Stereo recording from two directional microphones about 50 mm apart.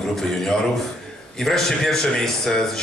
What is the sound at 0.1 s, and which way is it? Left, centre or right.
A man's voice, centre.